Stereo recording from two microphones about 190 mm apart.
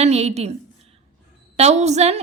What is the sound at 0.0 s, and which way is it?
Speech, 35° right (ahead or behind).